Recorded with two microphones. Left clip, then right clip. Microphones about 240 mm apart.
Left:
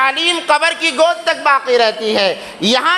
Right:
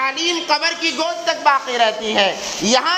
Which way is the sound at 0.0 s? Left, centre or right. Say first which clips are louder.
Left 5 dB; left.